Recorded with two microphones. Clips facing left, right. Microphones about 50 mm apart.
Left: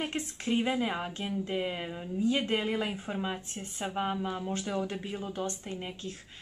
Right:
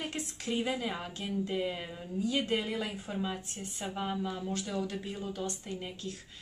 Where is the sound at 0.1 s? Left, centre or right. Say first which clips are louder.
Left 4 dB; left.